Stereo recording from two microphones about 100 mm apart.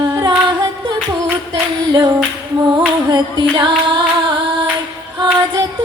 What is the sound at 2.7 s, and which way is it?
Music, 50° right (ahead or behind).